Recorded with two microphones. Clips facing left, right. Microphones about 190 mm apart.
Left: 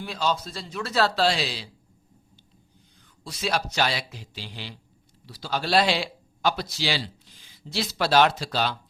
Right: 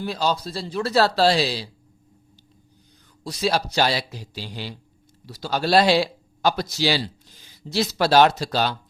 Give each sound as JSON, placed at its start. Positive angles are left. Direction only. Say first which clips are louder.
{"t": 0.0, "sound": "speech", "louder": "right 3 dB", "side_deg": -35}
{"t": 3.2, "sound": "speech", "louder": "right 5 dB", "side_deg": -35}